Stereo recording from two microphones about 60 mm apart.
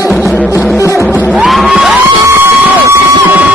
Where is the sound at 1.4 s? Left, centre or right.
Centre.